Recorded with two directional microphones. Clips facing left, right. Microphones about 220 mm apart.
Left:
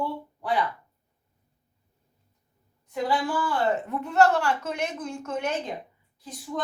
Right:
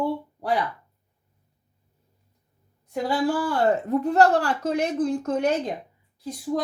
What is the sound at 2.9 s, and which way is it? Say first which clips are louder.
Speech: right 3 dB; 40° right (ahead or behind).